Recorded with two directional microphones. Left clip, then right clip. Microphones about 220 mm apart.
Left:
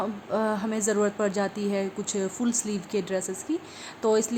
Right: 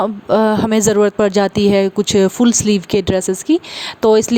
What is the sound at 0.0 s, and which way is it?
A woman's voice, 40° right (ahead or behind).